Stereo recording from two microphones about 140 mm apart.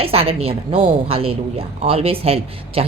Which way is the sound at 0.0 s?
45° right (ahead or behind).